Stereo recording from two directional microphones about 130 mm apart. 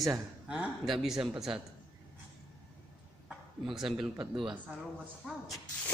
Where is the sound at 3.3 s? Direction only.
5° right (ahead or behind).